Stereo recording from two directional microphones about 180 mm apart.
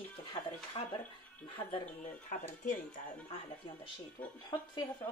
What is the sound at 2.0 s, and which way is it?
Speech, 45° left (ahead or behind).